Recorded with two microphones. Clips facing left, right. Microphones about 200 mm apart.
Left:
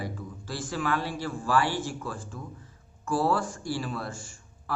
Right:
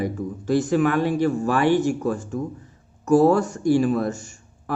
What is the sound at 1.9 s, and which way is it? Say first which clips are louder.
Speech: right 12 dB; 45° right (ahead or behind).